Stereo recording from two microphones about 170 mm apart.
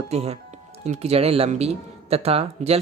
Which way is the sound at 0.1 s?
40° right (ahead or behind).